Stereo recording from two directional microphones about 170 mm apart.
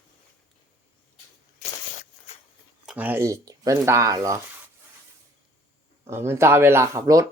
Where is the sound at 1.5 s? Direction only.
45° left (ahead or behind).